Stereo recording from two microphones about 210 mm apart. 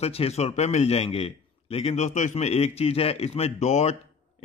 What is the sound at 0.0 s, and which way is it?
Speech, 30° left (ahead or behind).